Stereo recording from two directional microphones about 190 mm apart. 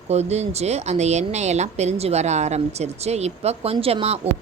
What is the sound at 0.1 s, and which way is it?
Speech, 35° right (ahead or behind).